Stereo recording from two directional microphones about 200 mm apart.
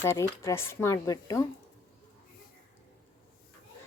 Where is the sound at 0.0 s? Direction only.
15° left (ahead or behind).